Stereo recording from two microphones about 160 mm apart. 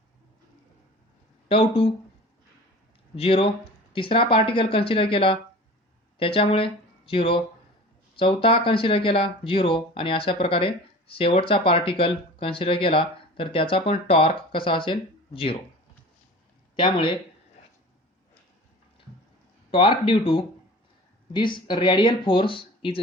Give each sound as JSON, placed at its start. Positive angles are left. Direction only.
{"t": 1.5, "sound": "speech", "side_deg": 35}
{"t": 3.2, "sound": "speech", "side_deg": 35}
{"t": 16.7, "sound": "speech", "side_deg": 30}
{"t": 19.7, "sound": "speech", "side_deg": 35}